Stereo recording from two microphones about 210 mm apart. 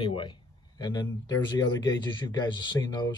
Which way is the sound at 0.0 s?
25° left (ahead or behind).